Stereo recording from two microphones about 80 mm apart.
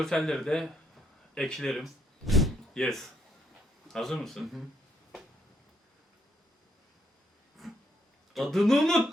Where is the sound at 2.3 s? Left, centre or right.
Centre.